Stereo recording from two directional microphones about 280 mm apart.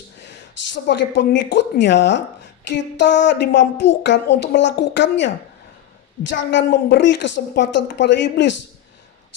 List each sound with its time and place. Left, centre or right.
0.2 s a woman's voice: left